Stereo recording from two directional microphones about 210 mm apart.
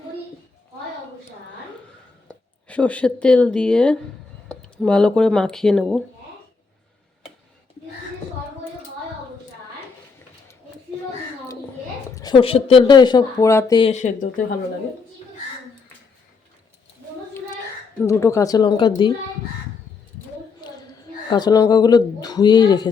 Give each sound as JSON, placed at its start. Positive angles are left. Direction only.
{"t": 2.2, "sound": "speech", "side_deg": 5}
{"t": 12.1, "sound": "speech", "side_deg": 20}
{"t": 13.9, "sound": "speech", "side_deg": 35}
{"t": 18.0, "sound": "speech", "side_deg": 15}
{"t": 21.2, "sound": "speech", "side_deg": 20}